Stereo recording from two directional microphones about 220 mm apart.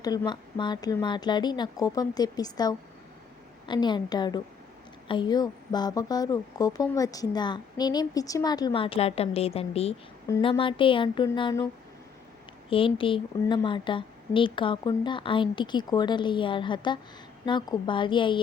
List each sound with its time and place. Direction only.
0.0 s a woman's voice: 15° left (ahead or behind)
10.2 s a woman's voice: 15° left (ahead or behind)
12.7 s a woman's voice: 25° left (ahead or behind)